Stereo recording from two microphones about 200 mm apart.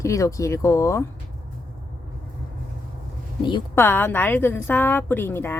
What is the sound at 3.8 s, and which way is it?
Speech, 10° left (ahead or behind).